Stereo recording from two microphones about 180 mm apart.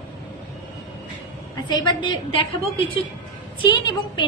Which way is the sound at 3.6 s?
25° left (ahead or behind).